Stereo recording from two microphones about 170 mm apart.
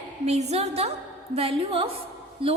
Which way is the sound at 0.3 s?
40° right (ahead or behind).